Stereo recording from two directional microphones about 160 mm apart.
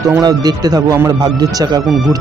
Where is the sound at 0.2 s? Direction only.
25° right (ahead or behind).